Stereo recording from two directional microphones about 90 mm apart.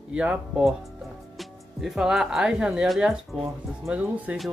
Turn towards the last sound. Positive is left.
turn(degrees=-15)  # may be behind; listen again after turning